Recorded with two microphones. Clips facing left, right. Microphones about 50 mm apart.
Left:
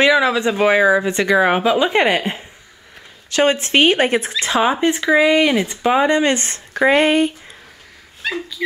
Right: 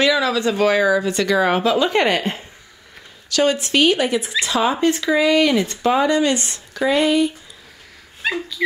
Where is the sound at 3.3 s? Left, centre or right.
Left.